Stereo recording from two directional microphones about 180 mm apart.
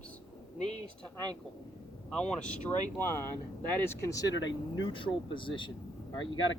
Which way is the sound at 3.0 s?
15° left (ahead or behind).